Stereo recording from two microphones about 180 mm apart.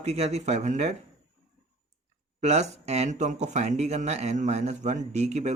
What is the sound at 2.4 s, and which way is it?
A man's voice, 40° right (ahead or behind).